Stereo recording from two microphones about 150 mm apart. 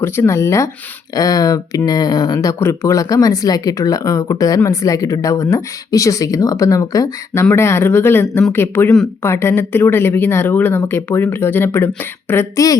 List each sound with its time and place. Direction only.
0.0 s speech: 15° left (ahead or behind)